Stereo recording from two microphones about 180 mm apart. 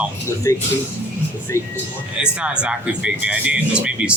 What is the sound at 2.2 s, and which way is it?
Speech, 5° right (ahead or behind).